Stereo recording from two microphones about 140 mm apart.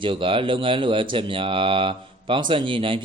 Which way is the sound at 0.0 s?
40° right (ahead or behind).